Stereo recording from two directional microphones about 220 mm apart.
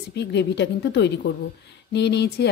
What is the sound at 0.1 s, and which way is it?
A woman's voice, 50° left (ahead or behind).